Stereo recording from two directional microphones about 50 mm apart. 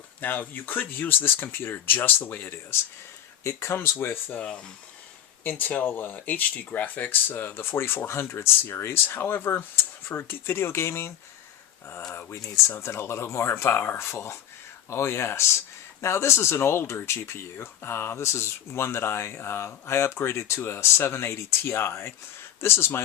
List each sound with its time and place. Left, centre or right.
0.2 s speech: left
3.4 s speech: left
4.4 s speech: left
5.4 s speech: left
9.0 s speech: left
12.8 s speech: left
14.1 s speech: left